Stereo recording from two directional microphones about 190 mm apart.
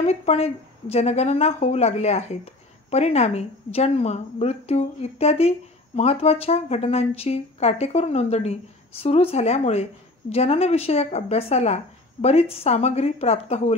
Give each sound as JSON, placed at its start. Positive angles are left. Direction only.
{"t": 0.0, "sound": "a woman's voice", "side_deg": 35}